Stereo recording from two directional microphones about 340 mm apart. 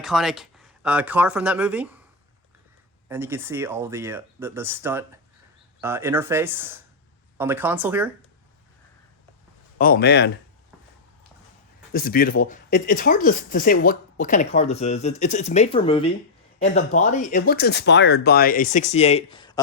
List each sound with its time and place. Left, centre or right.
0.0 s speech: centre
3.1 s speech: centre
9.7 s speech: left
11.9 s speech: left